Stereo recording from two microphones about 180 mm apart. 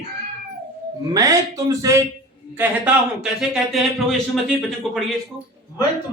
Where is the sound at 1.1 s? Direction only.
20° right (ahead or behind).